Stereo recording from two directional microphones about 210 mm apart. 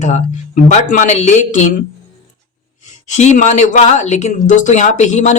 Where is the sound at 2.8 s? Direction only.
35° left (ahead or behind).